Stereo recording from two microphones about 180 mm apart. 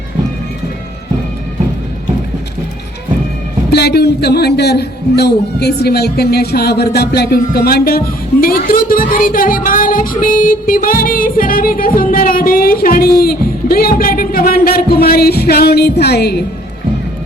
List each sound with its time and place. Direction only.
3.7 s speech: 65° left (ahead or behind)